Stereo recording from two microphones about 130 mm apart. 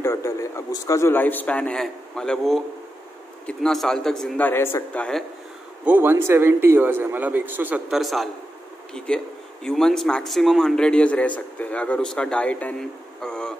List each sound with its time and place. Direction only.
0.0 s a man's voice: 20° left (ahead or behind); by 4.4 s 5° left (ahead or behind)
4.4 s speech: 15° left (ahead or behind)
5.9 s speech: 15° right (ahead or behind)
7.9 s a man's voice: centre (ahead or behind)